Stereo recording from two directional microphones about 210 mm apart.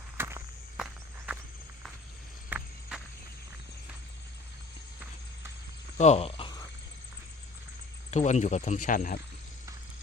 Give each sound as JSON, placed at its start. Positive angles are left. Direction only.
{"t": 0.2, "sound": "walk", "side_deg": -10}
{"t": 2.5, "sound": "walk", "side_deg": -10}
{"t": 6.0, "sound": "a sound", "side_deg": 30}
{"t": 8.1, "sound": "speech", "side_deg": 35}